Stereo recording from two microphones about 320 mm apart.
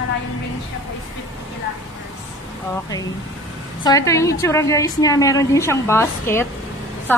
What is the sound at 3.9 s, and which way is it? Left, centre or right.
A woman's voice, centre.